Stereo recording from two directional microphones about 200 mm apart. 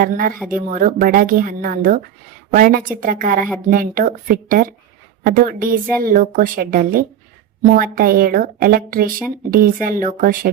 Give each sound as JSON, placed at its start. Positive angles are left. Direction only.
{"t": 0.0, "sound": "a woman's voice", "side_deg": -45}